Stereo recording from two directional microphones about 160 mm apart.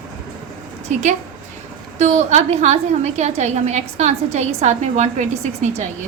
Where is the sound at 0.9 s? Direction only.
50° right (ahead or behind).